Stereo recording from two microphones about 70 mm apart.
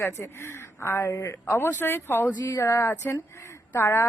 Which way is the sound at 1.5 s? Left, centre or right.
Left.